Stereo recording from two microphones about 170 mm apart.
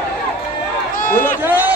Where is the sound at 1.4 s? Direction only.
10° right (ahead or behind).